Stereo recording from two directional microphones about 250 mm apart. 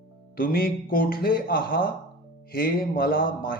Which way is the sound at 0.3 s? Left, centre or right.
Left.